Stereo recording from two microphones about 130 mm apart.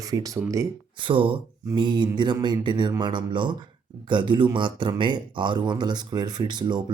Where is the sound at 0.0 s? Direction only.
25° right (ahead or behind).